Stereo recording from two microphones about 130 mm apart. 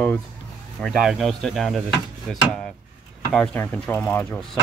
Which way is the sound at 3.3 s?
10° left (ahead or behind).